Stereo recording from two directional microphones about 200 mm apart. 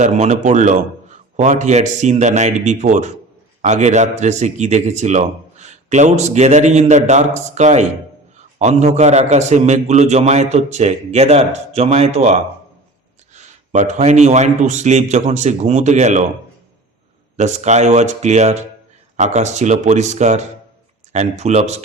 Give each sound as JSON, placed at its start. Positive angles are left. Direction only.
{"t": 0.0, "sound": "a man's voice", "side_deg": -35}
{"t": 17.3, "sound": "a man's voice", "side_deg": -35}